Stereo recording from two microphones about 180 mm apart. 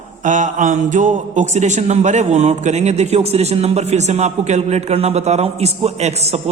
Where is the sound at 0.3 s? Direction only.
45° right (ahead or behind).